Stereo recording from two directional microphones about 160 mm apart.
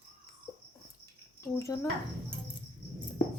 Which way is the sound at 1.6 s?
20° left (ahead or behind).